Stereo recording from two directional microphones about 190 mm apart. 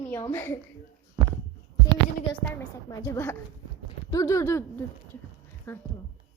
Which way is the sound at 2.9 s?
15° left (ahead or behind).